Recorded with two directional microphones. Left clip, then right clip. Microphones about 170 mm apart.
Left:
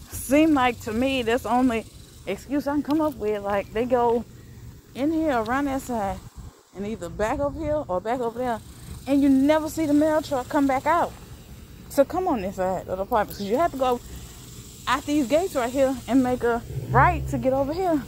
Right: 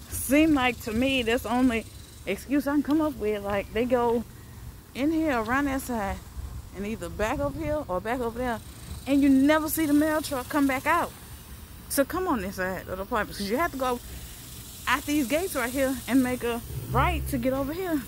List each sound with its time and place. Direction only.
0.1 s speech: 20° right (ahead or behind); by 4.2 s 35° right (ahead or behind)
4.9 s speech: 15° right (ahead or behind)
9.4 s speech: 30° right (ahead or behind)
12.2 s speech: 25° right (ahead or behind)
12.8 s speech: 30° right (ahead or behind)
13.6 s speech: 5° right (ahead or behind)
17.1 s speech: 30° right (ahead or behind)
17.7 s speech: 20° right (ahead or behind)